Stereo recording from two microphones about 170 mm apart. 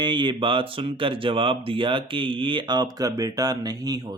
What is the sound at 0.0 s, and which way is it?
Speech, 25° right (ahead or behind).